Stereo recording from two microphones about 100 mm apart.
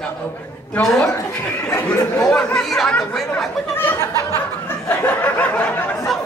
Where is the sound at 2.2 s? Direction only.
5° left (ahead or behind).